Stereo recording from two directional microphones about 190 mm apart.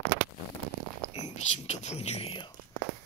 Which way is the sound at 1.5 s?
35° left (ahead or behind).